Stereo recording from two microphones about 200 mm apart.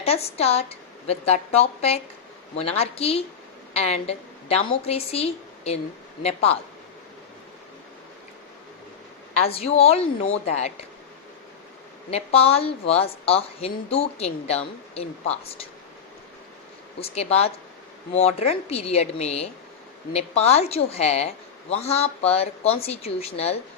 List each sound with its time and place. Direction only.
0.0 s a woman's voice: 30° left (ahead or behind)
9.4 s a woman's voice: 30° left (ahead or behind)
12.1 s a woman's voice: 30° left (ahead or behind)
17.0 s a woman's voice: 30° left (ahead or behind)